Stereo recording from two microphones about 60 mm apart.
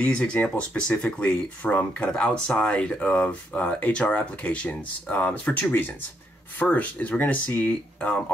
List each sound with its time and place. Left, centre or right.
0.0 s speech: centre